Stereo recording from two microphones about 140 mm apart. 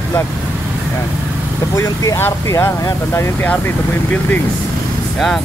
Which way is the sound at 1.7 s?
20° left (ahead or behind).